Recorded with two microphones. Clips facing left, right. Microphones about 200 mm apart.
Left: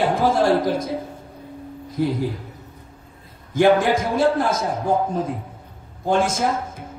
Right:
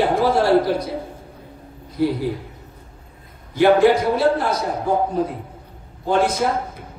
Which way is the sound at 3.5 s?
45° left (ahead or behind).